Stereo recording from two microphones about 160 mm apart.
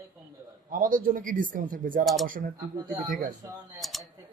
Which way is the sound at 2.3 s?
60° right (ahead or behind).